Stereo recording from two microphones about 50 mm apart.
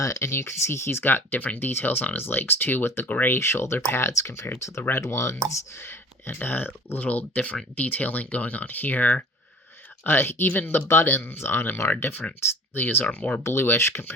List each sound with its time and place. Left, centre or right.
0.0 s speech: left
1.1 s speech: left
3.1 s speech: left
3.3 s speech: left
4.9 s speech: left
5.5 s speech: left
10.0 s speech: left
10.8 s speech: left
13.1 s speech: left
13.4 s speech: left